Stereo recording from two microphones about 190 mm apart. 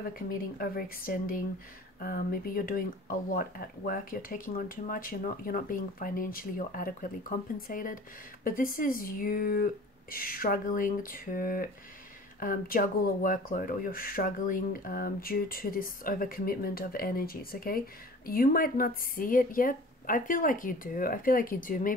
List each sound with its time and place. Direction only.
0.0 s speech: 50° left (ahead or behind)